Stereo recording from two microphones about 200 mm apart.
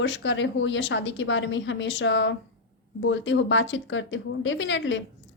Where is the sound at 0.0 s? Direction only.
65° left (ahead or behind).